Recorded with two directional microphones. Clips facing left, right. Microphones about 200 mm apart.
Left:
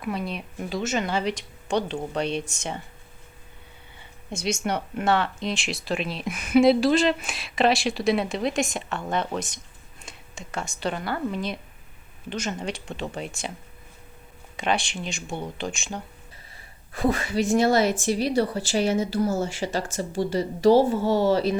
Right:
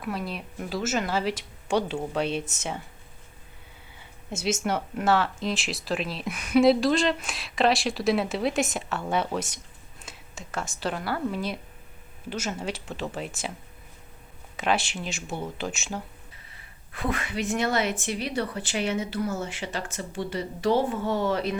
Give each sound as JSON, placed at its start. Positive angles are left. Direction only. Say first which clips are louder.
{"t": 0.0, "sound": "speech", "louder": "left 2 dB", "side_deg": 0}
{"t": 4.3, "sound": "speech", "louder": "even", "side_deg": -5}
{"t": 14.5, "sound": "speech", "louder": "even", "side_deg": -5}
{"t": 16.9, "sound": "speech", "louder": "left 6 dB", "side_deg": 40}